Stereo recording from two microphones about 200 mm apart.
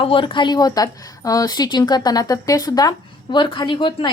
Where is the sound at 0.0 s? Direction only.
25° left (ahead or behind).